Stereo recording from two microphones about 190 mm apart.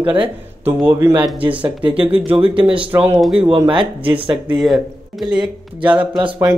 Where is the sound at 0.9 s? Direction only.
15° right (ahead or behind).